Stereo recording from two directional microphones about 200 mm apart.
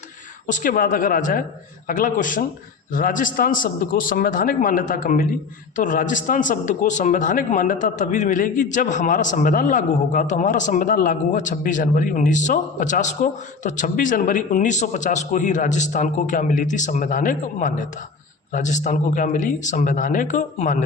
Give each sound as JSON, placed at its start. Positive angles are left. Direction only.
{"t": 0.4, "sound": "a man's voice", "side_deg": 40}